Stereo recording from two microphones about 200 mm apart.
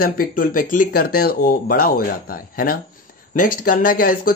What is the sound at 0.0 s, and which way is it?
Speech, 45° left (ahead or behind).